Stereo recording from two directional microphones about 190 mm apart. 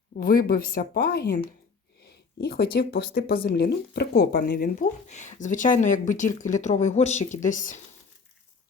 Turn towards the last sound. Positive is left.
turn(degrees=45)  # may be behind; listen again after turning